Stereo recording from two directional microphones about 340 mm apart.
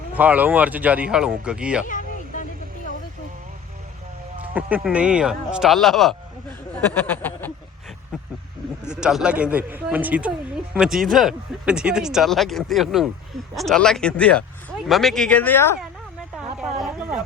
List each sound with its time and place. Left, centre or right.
0.1 s speech: centre
1.9 s vehicle: left
4.5 s speech: centre
6.9 s a sound: centre
8.8 s speech: centre
16.6 s a sound: centre